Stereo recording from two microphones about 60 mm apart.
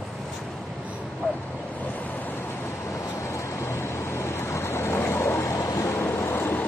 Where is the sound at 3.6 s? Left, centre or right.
Left.